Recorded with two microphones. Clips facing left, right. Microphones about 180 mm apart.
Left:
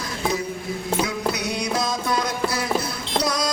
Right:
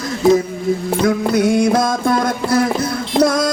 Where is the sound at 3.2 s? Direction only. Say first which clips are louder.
Right 11 dB; 50° right (ahead or behind).